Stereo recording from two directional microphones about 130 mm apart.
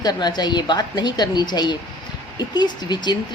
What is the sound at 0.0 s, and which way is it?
A woman's voice, 30° left (ahead or behind).